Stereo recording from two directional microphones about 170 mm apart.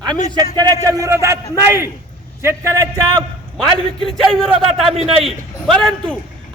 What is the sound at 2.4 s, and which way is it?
Speech, 15° right (ahead or behind).